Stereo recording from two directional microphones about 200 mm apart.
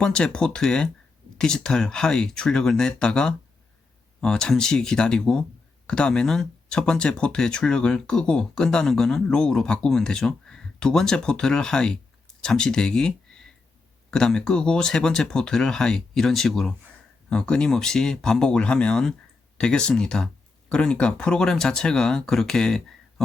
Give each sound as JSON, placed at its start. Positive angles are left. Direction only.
{"t": 0.0, "sound": "speech", "side_deg": 5}